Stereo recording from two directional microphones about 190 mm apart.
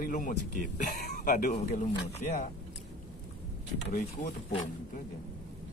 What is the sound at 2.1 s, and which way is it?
Speech, 40° left (ahead or behind).